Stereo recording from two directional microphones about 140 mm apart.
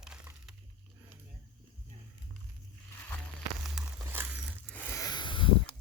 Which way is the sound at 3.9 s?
15° right (ahead or behind).